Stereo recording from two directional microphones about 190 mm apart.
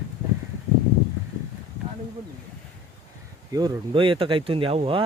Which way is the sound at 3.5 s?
20° right (ahead or behind).